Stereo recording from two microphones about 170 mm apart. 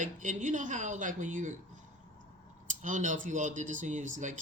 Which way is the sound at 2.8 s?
50° right (ahead or behind).